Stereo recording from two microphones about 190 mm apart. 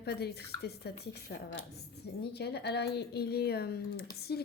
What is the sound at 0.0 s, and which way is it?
A woman's voice, 60° left (ahead or behind).